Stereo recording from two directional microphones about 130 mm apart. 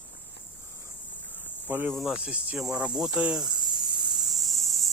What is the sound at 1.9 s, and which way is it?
Cricket, centre (ahead or behind).